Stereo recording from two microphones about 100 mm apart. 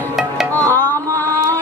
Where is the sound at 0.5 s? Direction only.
20° left (ahead or behind).